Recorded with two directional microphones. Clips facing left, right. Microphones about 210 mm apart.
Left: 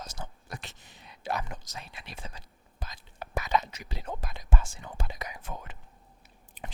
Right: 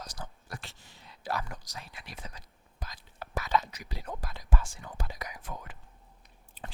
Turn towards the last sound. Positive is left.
turn(degrees=15)  # may be behind; listen again after turning